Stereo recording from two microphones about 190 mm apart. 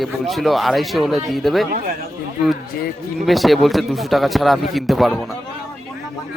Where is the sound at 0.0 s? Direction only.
Centre (ahead or behind).